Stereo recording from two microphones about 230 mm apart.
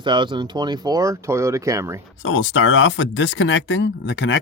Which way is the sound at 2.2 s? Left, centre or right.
Left.